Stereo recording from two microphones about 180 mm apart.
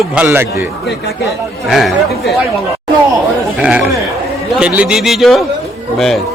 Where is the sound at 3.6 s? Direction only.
5° right (ahead or behind).